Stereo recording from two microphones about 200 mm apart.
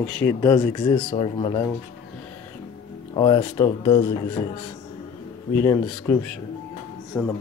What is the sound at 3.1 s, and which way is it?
Speech, 20° left (ahead or behind).